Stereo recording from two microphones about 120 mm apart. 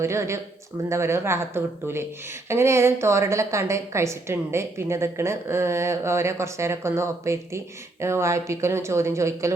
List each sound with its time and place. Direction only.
0.0 s a woman's voice: 25° right (ahead or behind)